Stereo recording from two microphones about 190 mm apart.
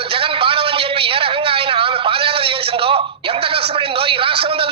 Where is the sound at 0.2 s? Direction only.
30° right (ahead or behind).